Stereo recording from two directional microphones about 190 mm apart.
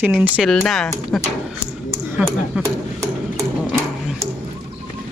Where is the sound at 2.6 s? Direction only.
15° right (ahead or behind).